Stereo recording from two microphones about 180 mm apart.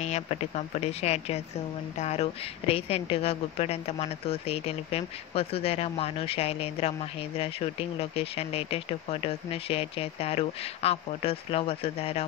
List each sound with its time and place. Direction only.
0.0 s a woman's voice: 35° left (ahead or behind)